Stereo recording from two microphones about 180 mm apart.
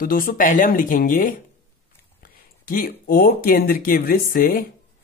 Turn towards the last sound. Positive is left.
turn(degrees=55)  # may be behind; listen again after turning